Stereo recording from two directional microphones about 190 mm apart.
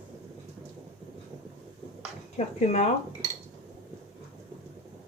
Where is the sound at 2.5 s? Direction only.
35° left (ahead or behind).